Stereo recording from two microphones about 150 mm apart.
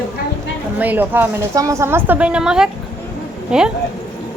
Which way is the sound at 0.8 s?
10° right (ahead or behind).